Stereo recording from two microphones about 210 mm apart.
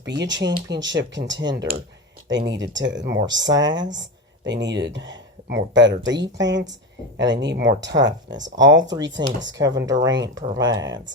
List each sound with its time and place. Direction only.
0.0 s speech: 60° right (ahead or behind)
9.2 s speech: 20° right (ahead or behind)